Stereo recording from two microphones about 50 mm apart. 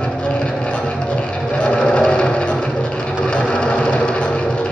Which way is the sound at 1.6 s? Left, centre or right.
Left.